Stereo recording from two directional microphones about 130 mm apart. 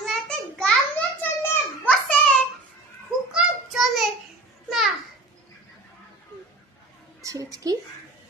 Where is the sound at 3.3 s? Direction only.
Centre (ahead or behind).